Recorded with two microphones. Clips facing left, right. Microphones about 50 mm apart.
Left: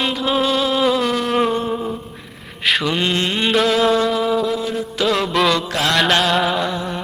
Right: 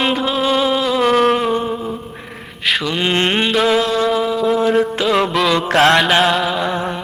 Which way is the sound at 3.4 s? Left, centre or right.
Centre.